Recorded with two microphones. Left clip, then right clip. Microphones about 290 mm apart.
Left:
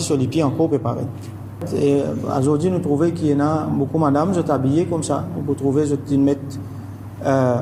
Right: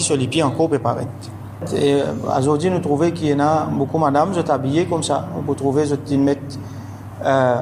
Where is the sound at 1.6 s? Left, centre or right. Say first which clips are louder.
Right 1 dB; centre.